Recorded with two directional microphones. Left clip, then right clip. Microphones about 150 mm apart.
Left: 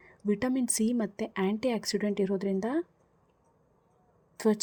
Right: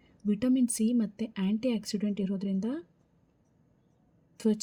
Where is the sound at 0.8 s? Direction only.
25° left (ahead or behind).